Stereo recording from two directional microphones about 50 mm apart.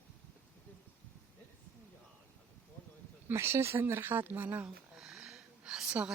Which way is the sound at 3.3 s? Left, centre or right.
Right.